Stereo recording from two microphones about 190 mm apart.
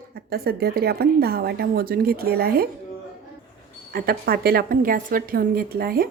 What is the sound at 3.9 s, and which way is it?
A woman's voice, 50° right (ahead or behind).